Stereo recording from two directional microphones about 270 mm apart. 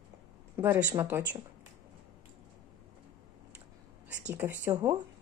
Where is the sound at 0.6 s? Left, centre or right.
Centre.